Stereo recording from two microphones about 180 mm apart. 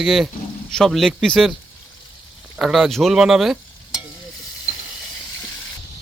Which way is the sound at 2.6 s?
Centre (ahead or behind).